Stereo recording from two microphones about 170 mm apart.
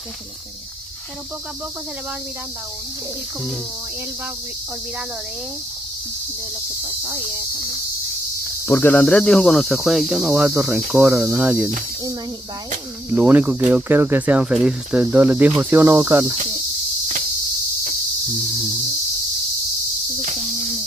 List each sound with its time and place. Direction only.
7.3 s cricket: 20° right (ahead or behind)
8.6 s speech: 10° left (ahead or behind); by 11.7 s 5° right (ahead or behind)
13.1 s speech: 10° right (ahead or behind)
20.3 s cricket: centre (ahead or behind)